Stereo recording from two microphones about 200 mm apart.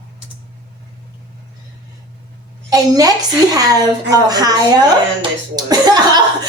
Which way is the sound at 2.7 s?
20° right (ahead or behind).